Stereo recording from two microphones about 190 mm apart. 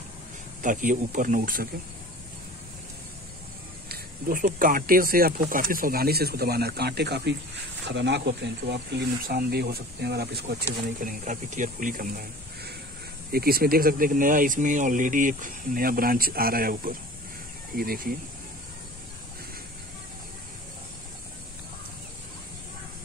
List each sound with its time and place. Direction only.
0.6 s speech: 45° right (ahead or behind)
3.9 s speech: 50° right (ahead or behind)